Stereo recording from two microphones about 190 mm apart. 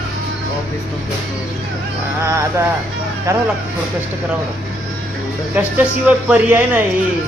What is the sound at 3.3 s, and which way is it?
Speech, 15° right (ahead or behind).